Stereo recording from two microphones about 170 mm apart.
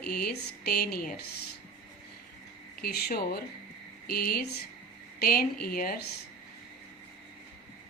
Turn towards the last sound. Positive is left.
turn(degrees=60)  # may be behind; listen again after turning